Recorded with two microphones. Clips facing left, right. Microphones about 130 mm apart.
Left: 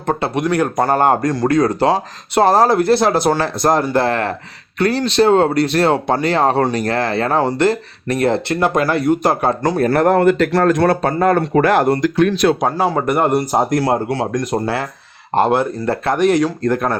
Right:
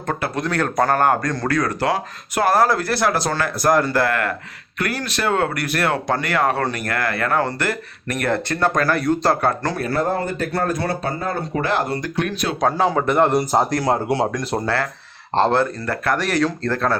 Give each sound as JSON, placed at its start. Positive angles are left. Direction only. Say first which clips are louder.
{"t": 0.1, "sound": "speech", "louder": "left 5 dB", "side_deg": 25}
{"t": 0.4, "sound": "speech", "louder": "left 3 dB", "side_deg": 10}
{"t": 1.5, "sound": "speech", "louder": "left 5 dB", "side_deg": 25}
{"t": 8.5, "sound": "speech", "louder": "left 3 dB", "side_deg": 10}
{"t": 9.9, "sound": "speech", "louder": "left 10 dB", "side_deg": 75}
{"t": 11.5, "sound": "speech", "louder": "left 8 dB", "side_deg": 60}
{"t": 12.5, "sound": "speech", "louder": "left 1 dB", "side_deg": 10}
{"t": 14.6, "sound": "speech", "louder": "left 2 dB", "side_deg": 20}